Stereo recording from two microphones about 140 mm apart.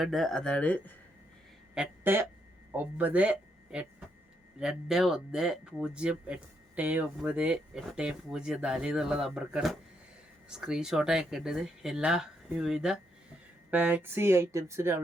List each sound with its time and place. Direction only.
0.0 s speech: centre (ahead or behind)
1.7 s a sound: 10° right (ahead or behind)
2.7 s speech: 10° right (ahead or behind)